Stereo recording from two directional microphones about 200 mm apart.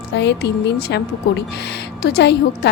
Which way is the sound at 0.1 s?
60° left (ahead or behind).